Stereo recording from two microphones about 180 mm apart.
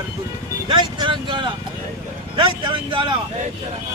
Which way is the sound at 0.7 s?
25° right (ahead or behind).